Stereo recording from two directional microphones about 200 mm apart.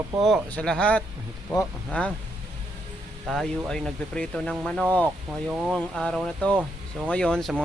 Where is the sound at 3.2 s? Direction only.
Centre (ahead or behind).